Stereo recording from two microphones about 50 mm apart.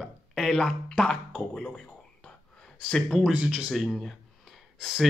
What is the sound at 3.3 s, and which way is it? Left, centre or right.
Speech, centre.